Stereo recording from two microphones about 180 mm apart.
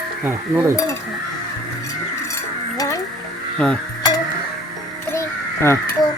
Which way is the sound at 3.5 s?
5° left (ahead or behind).